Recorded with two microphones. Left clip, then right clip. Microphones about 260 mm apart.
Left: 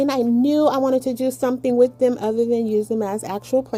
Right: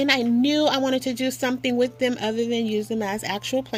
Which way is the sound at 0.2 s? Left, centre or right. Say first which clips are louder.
Left 3 dB; right.